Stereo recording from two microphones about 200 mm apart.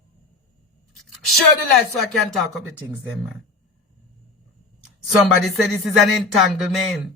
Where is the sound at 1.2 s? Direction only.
Centre (ahead or behind).